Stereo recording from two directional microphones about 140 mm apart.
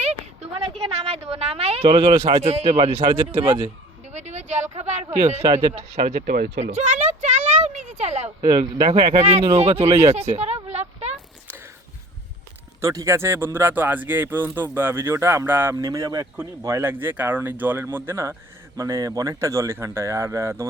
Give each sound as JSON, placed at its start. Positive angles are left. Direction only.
{"t": 0.9, "sound": "speech", "side_deg": -50}
{"t": 4.1, "sound": "a sound", "side_deg": -55}
{"t": 4.8, "sound": "speech", "side_deg": -50}
{"t": 6.2, "sound": "speech", "side_deg": -90}
{"t": 6.6, "sound": "a sound", "side_deg": -55}
{"t": 8.4, "sound": "speech", "side_deg": -30}
{"t": 8.9, "sound": "speech", "side_deg": -40}
{"t": 9.8, "sound": "speech", "side_deg": -20}
{"t": 10.1, "sound": "a sound", "side_deg": -50}
{"t": 12.8, "sound": "speech", "side_deg": -20}